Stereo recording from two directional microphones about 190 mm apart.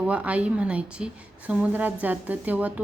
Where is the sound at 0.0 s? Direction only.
5° right (ahead or behind).